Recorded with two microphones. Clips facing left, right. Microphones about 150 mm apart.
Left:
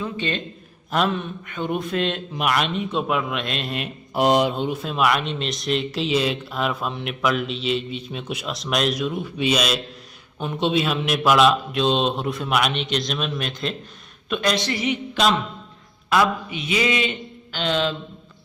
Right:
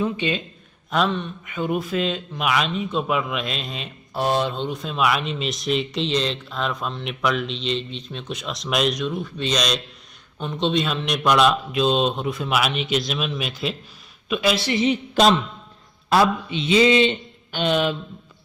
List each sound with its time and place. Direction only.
0.0 s a man's voice: 10° right (ahead or behind)
0.9 s speech: 5° left (ahead or behind)
4.1 s speech: 15° left (ahead or behind); by 14.7 s 5° right (ahead or behind)
14.7 s a man's voice: 25° right (ahead or behind)
15.1 s a man's voice: 40° right (ahead or behind)
16.0 s a man's voice: 30° right (ahead or behind)
17.6 s a man's voice: 15° right (ahead or behind)